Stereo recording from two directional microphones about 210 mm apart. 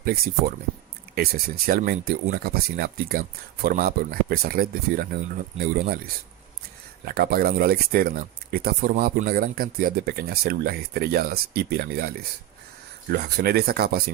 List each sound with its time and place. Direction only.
0.0 s speech: 45° right (ahead or behind)
7.1 s speech: 45° right (ahead or behind)